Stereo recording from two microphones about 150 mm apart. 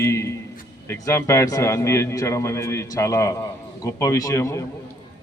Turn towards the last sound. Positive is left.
turn(degrees=20)  # may be behind; listen again after turning